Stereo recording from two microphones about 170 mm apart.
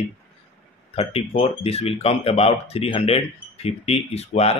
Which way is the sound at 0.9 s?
35° left (ahead or behind).